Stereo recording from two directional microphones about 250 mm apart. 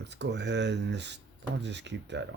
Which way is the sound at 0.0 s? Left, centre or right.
Right.